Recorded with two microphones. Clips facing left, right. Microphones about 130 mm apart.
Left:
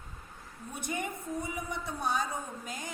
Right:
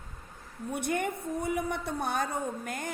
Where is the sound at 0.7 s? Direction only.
60° right (ahead or behind).